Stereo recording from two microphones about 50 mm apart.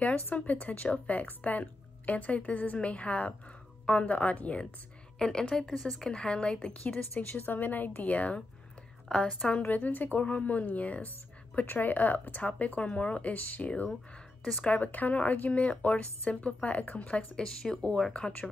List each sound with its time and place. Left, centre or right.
0.3 s a woman's voice: left
4.1 s speech: left
5.4 s speech: centre
6.0 s speech: centre
6.8 s speech: left
9.7 s speech: left
11.6 s speech: left
17.4 s speech: centre